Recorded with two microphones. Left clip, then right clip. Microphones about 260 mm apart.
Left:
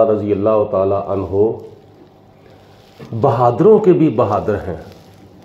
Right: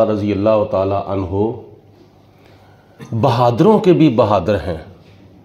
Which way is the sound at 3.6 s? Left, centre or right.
Right.